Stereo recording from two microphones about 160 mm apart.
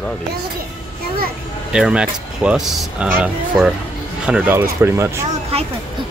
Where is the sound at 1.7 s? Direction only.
5° right (ahead or behind).